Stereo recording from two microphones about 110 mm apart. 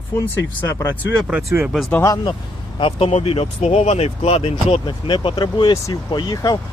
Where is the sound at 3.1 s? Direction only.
65° left (ahead or behind).